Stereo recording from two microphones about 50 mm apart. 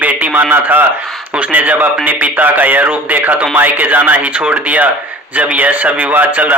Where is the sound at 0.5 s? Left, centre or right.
Right.